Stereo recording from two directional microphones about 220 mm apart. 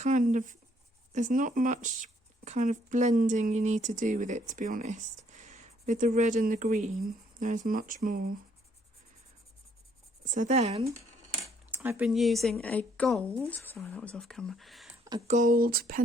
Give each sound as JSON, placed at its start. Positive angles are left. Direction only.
{"t": 0.0, "sound": "speech", "side_deg": -35}
{"t": 10.2, "sound": "speech", "side_deg": -35}
{"t": 11.7, "sound": "speech", "side_deg": -10}
{"t": 15.3, "sound": "speech", "side_deg": -35}